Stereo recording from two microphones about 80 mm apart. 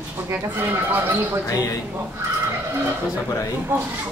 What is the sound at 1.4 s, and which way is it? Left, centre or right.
Speech, left.